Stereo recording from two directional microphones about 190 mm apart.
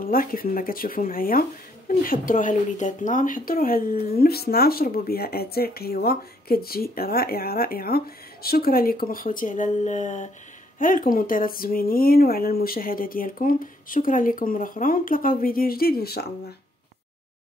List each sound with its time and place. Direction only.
0.0 s speech: 50° left (ahead or behind)